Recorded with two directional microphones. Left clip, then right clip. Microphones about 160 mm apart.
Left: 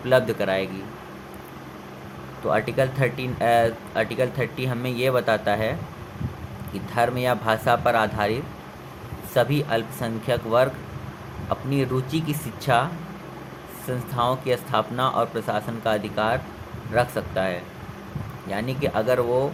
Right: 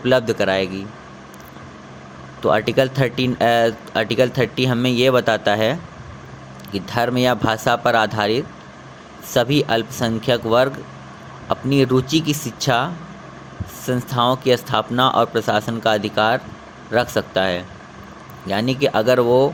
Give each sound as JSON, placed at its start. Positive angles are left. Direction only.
{"t": 0.0, "sound": "speech", "side_deg": -50}
{"t": 2.4, "sound": "speech", "side_deg": -55}
{"t": 6.7, "sound": "speech", "side_deg": -50}